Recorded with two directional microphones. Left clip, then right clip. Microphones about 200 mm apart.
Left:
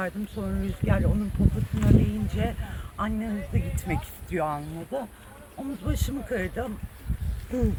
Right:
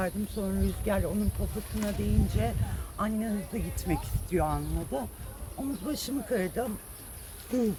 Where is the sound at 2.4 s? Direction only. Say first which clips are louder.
Left 1 dB; centre (ahead or behind).